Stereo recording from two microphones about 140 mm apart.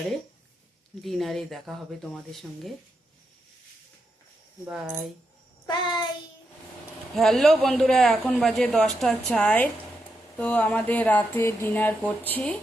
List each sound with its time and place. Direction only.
1.0 s a man's voice: centre (ahead or behind)
4.7 s a man's voice: 5° right (ahead or behind)
5.6 s child singing: 30° left (ahead or behind)
7.2 s a man's voice: centre (ahead or behind)